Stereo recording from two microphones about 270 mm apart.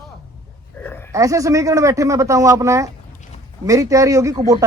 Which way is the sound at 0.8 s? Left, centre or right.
Centre.